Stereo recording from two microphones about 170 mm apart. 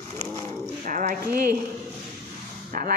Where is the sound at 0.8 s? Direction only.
55° right (ahead or behind).